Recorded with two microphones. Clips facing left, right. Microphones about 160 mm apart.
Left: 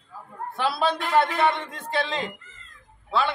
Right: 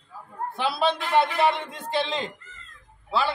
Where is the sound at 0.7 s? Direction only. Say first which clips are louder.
Even; 25° right (ahead or behind).